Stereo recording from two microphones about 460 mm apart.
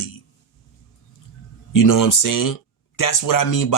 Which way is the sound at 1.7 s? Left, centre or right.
Left.